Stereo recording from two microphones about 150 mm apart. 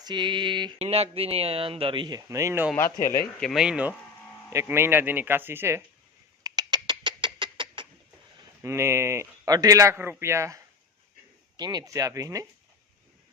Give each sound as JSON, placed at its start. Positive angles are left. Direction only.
{"t": 0.0, "sound": "speech", "side_deg": -30}
{"t": 0.8, "sound": "speech", "side_deg": -40}
{"t": 3.4, "sound": "speech", "side_deg": 0}
{"t": 6.4, "sound": "rodents", "side_deg": -25}
{"t": 8.6, "sound": "speech", "side_deg": -20}